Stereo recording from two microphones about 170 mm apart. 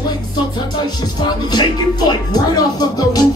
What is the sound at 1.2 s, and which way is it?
Speech, 25° left (ahead or behind).